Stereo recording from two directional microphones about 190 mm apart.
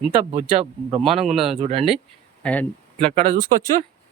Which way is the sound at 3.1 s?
25° right (ahead or behind).